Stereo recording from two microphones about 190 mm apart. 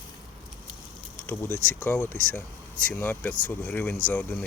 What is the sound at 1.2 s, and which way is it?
Speech, 10° left (ahead or behind).